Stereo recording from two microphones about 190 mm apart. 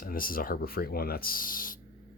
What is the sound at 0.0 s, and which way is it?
Speech, 50° left (ahead or behind).